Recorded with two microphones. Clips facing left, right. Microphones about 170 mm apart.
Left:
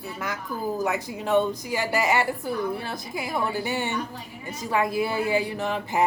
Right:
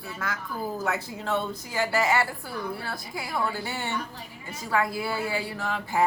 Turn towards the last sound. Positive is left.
turn(degrees=20)  # may be behind; listen again after turning